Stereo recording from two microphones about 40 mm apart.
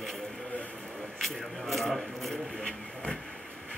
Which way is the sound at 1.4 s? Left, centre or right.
Centre.